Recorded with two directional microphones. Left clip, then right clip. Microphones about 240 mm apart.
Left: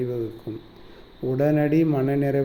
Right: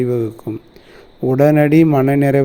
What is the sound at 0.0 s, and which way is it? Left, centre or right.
Speech, right.